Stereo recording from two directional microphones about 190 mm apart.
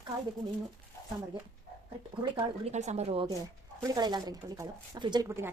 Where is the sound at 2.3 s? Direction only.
35° right (ahead or behind).